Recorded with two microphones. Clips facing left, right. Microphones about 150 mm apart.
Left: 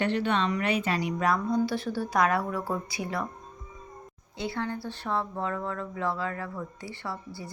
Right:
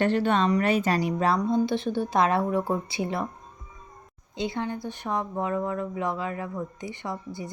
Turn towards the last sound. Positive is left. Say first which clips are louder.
# right 3 dB
turn(degrees=-20)  # may be behind; listen again after turning